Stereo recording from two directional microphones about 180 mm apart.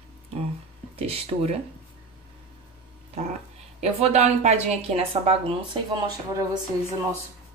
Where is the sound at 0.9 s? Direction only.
35° right (ahead or behind).